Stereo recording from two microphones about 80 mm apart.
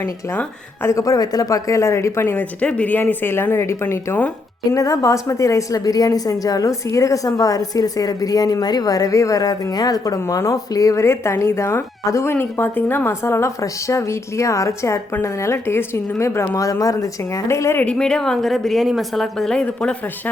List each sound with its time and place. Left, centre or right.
0.0 s a woman's voice: left
0.9 s a woman's voice: left
4.7 s a woman's voice: left
17.7 s a woman's voice: centre